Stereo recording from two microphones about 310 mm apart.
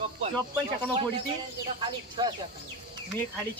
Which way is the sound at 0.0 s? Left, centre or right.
Centre.